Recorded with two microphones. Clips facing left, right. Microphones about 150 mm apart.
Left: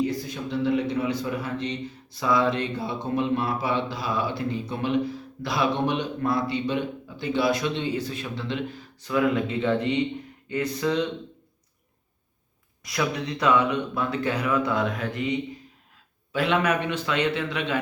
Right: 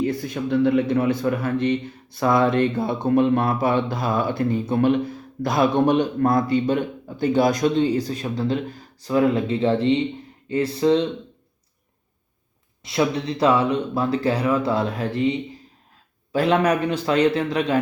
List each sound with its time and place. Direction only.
0.0 s a man's voice: 55° right (ahead or behind); by 11.1 s 30° right (ahead or behind)
12.8 s speech: 25° right (ahead or behind)